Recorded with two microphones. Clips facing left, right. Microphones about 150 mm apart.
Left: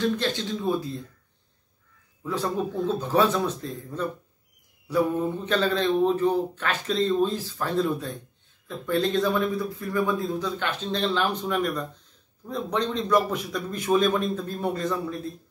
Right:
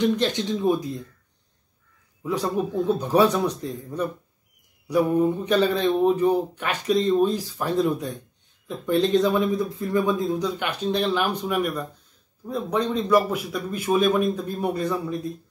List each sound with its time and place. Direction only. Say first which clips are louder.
0.0 s speech: right 4 dB; 20° right (ahead or behind)
2.2 s speech: right 2 dB; 15° right (ahead or behind)